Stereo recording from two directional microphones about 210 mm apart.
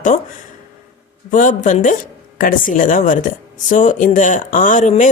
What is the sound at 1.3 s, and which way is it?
Speech, 40° left (ahead or behind).